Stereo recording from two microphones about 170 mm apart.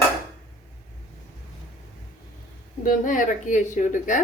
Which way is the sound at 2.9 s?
50° left (ahead or behind).